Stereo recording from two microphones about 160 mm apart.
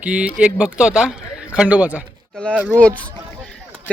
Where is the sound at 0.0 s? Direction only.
10° right (ahead or behind).